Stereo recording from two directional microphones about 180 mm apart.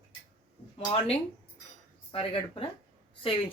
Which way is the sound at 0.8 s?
35° left (ahead or behind).